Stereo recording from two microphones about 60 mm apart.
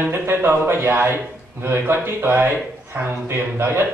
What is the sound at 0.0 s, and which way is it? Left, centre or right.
A man's voice, right.